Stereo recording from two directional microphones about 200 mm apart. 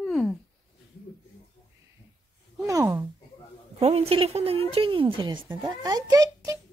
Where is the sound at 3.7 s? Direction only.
30° right (ahead or behind).